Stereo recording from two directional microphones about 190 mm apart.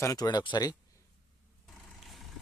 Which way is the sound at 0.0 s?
20° left (ahead or behind).